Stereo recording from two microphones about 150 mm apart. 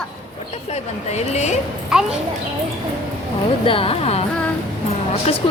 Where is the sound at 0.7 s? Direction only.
45° left (ahead or behind).